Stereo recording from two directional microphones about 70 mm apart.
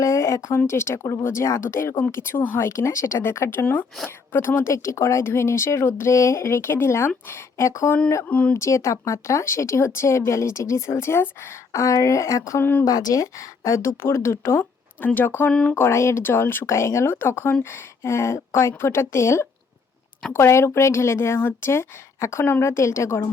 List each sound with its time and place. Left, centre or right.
0.0 s a sound: left
0.7 s speech: left
4.7 s speech: left
8.3 s speech: centre
8.5 s speech: left
11.7 s speech: left
12.5 s speech: left
12.8 s speech: left
14.6 s speech: left
15.7 s speech: left